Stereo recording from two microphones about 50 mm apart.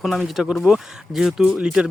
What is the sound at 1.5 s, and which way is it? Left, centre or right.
Speech, centre.